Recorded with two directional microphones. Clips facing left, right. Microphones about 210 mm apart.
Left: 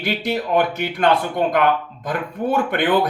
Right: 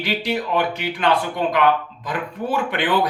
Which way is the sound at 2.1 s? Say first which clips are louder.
Left 3 dB; 45° left (ahead or behind).